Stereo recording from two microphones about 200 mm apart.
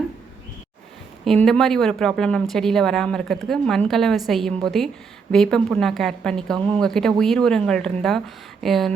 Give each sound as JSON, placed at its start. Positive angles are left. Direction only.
{"t": 1.2, "sound": "speech", "side_deg": 0}